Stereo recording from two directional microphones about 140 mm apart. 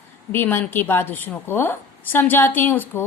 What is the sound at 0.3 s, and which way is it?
A woman's voice, 15° left (ahead or behind).